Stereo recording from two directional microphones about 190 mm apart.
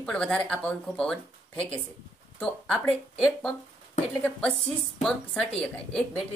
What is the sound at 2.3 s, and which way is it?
Speech, 5° left (ahead or behind).